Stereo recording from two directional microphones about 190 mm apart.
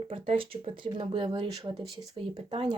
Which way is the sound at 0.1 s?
30° right (ahead or behind).